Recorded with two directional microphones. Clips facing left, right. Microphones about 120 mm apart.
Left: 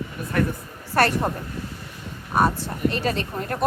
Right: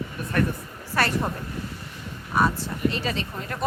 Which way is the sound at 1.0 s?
55° left (ahead or behind).